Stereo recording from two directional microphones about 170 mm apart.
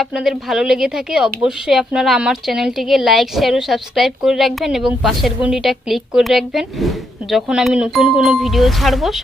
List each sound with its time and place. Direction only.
0.0 s speech: 5° right (ahead or behind)